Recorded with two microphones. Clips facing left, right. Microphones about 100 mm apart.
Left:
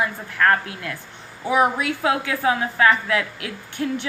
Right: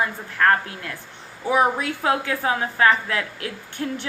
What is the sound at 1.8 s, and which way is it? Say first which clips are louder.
A woman's voice: left 1 dB; 35° right (ahead or behind).